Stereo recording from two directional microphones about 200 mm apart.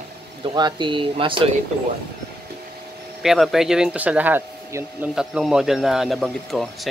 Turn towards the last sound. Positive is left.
turn(degrees=0)  # may be behind; listen again after turning